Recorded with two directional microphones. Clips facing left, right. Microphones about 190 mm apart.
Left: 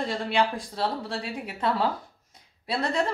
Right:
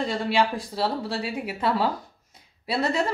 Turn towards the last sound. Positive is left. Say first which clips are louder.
# right 2 dB
turn(degrees=-5)  # may be behind; listen again after turning